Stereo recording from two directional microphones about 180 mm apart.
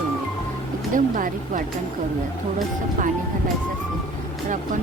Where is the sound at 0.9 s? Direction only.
50° right (ahead or behind).